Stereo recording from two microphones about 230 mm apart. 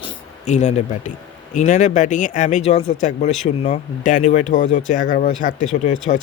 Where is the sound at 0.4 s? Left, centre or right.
Left.